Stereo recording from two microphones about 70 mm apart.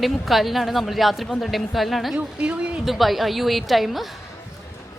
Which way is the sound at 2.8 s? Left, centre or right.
Centre.